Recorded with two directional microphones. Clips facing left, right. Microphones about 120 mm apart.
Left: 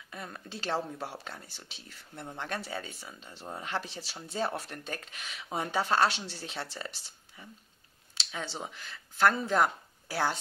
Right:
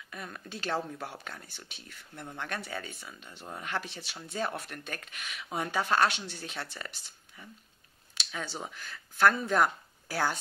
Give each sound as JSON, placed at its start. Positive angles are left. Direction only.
{"t": 0.1, "sound": "speech", "side_deg": 25}
{"t": 8.3, "sound": "speech", "side_deg": 25}